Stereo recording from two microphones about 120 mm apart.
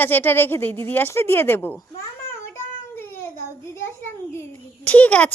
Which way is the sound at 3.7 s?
20° left (ahead or behind).